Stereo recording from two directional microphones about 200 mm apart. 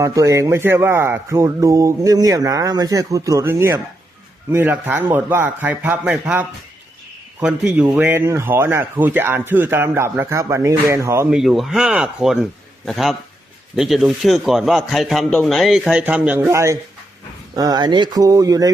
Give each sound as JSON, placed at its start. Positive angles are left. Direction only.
{"t": 0.0, "sound": "speech", "side_deg": -15}
{"t": 7.4, "sound": "speech", "side_deg": -5}
{"t": 11.3, "sound": "a man's voice", "side_deg": 0}